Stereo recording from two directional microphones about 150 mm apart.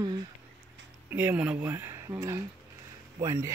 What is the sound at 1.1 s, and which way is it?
Speech, 10° right (ahead or behind).